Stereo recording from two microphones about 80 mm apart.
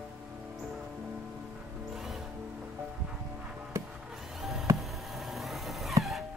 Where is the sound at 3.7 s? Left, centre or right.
Right.